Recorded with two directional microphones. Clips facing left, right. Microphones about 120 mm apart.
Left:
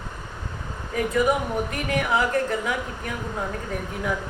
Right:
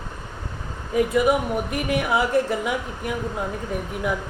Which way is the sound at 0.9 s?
15° right (ahead or behind).